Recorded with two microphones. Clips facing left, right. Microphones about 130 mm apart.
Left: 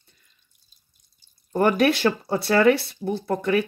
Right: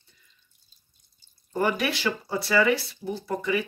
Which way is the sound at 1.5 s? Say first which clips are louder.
Left 7 dB; 55° left (ahead or behind).